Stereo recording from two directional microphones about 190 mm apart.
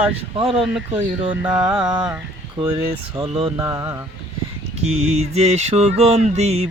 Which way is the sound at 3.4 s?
20° right (ahead or behind).